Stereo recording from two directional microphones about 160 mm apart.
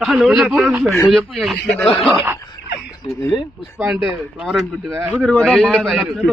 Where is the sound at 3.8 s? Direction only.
5° right (ahead or behind).